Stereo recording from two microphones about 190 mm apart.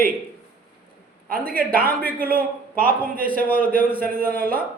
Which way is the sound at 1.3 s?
50° right (ahead or behind).